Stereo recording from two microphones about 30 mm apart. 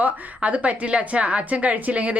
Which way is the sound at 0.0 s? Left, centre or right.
Right.